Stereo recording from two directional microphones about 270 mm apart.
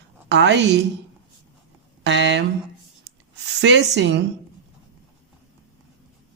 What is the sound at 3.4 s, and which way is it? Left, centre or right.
Speech, right.